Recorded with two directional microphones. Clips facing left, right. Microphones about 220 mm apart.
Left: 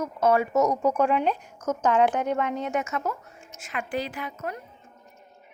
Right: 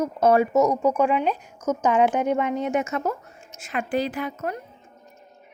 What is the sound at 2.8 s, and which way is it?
A woman's voice, 35° right (ahead or behind).